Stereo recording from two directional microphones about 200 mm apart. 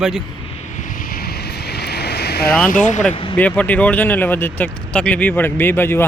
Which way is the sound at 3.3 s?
5° left (ahead or behind).